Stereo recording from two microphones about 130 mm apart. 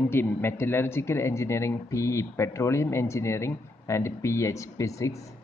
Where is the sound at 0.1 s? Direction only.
20° left (ahead or behind).